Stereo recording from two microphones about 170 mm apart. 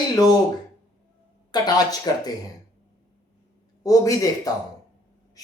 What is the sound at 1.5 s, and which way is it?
Speech, 25° left (ahead or behind).